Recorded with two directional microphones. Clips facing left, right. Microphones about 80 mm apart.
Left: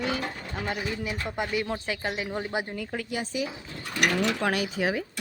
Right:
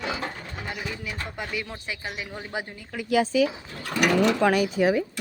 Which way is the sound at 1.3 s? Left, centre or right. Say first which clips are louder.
Left 5 dB; left.